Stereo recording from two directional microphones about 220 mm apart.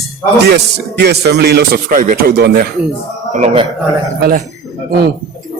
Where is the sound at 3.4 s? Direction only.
25° right (ahead or behind).